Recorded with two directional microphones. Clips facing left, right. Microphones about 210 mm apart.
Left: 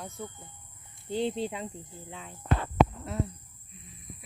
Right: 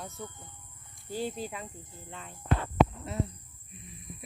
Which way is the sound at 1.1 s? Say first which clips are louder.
Left 5 dB; 25° left (ahead or behind).